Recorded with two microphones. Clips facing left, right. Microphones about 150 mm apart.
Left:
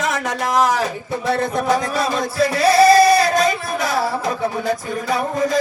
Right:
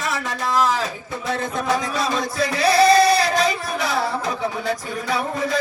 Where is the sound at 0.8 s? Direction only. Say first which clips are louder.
Left 5 dB; 60° left (ahead or behind).